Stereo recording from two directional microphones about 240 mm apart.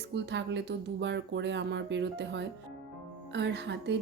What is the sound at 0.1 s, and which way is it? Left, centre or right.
Speech, right.